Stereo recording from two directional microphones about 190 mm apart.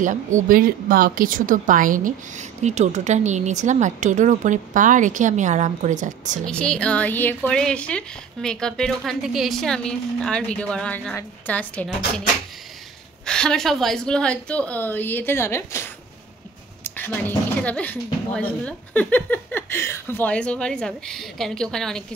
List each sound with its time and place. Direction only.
0.0 s speech: 40° right (ahead or behind)
6.4 s a woman's voice: 5° left (ahead or behind)
13.2 s a woman's voice: 5° left (ahead or behind)